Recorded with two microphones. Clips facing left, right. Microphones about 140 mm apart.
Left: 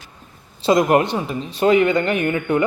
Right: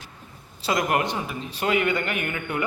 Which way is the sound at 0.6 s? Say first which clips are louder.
Left 8 dB; 25° left (ahead or behind).